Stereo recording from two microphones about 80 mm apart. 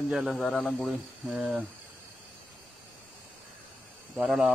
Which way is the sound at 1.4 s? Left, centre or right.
Centre.